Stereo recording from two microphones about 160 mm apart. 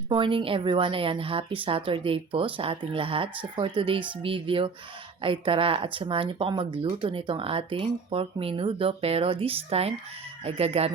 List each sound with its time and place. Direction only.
0.1 s speech: 35° right (ahead or behind)